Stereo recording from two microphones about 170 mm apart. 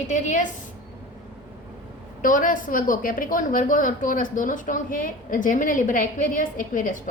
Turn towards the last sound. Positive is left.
turn(degrees=50)  # may be behind; listen again after turning